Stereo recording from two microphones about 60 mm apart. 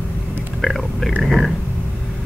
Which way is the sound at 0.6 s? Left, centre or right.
Centre.